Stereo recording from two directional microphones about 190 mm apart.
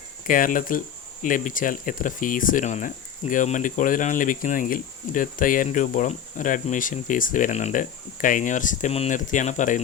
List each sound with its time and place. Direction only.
0.3 s speech: 45° left (ahead or behind)